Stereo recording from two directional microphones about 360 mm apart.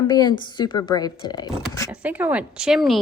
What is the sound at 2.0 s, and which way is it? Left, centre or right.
Speech, centre.